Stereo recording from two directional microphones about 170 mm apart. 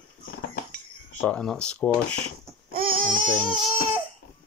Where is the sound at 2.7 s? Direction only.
55° right (ahead or behind).